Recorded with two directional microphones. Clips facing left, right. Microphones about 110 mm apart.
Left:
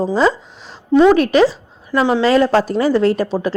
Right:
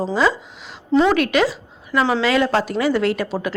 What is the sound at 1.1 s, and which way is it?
A woman's voice, 35° left (ahead or behind).